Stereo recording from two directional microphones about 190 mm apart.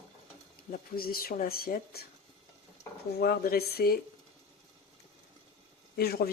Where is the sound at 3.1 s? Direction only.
55° left (ahead or behind).